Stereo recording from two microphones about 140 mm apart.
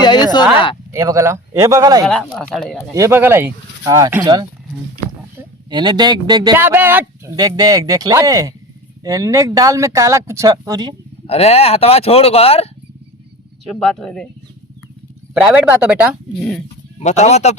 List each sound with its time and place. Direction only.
0.0 s a sound: 30° left (ahead or behind)
0.9 s speech: 20° right (ahead or behind)
2.0 s speech: 10° left (ahead or behind)
2.9 s speech: 20° right (ahead or behind)
3.8 s speech: 25° right (ahead or behind)
5.7 s speech: 30° right (ahead or behind)
6.6 s speech: 15° right (ahead or behind)
7.3 s speech: 30° right (ahead or behind)
11.3 s speech: 50° left (ahead or behind)
13.7 s speech: 5° left (ahead or behind)
15.4 s speech: 5° right (ahead or behind)
16.4 s speech: 5° left (ahead or behind)
17.0 s speech: 55° left (ahead or behind)